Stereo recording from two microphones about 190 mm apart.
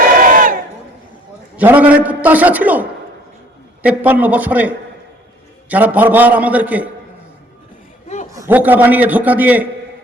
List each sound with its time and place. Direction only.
0.0 s crowd: 45° right (ahead or behind)
1.5 s a man's voice: 10° right (ahead or behind)
3.8 s a man's voice: 10° right (ahead or behind)
8.4 s a man's voice: 10° right (ahead or behind)